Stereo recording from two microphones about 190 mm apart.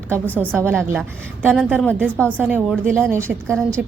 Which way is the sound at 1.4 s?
5° left (ahead or behind).